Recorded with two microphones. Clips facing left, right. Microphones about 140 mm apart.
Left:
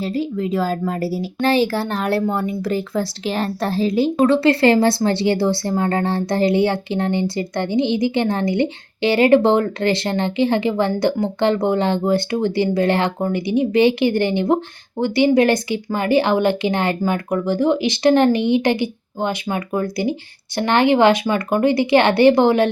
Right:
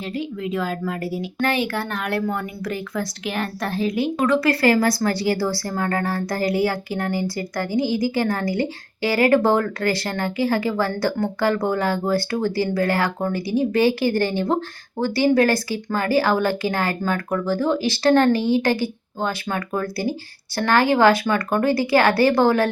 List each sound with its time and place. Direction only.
0.0 s a woman's voice: 35° left (ahead or behind)